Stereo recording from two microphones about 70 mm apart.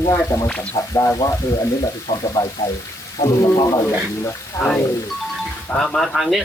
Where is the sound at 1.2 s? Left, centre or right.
Left.